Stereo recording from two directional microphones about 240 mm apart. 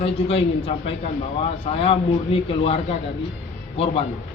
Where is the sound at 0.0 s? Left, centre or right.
Left.